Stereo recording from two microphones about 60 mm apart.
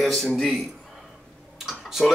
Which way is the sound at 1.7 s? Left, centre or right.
Centre.